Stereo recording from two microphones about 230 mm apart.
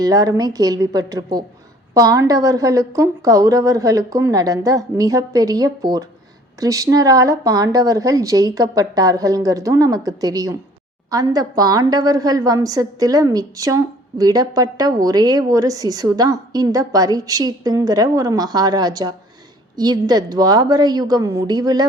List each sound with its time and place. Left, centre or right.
0.0 s a woman's voice: centre